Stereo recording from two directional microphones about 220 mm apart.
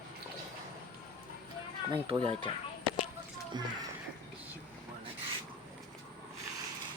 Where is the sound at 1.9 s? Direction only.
25° right (ahead or behind).